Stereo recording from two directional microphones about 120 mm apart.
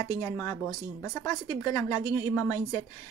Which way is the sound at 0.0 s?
25° left (ahead or behind).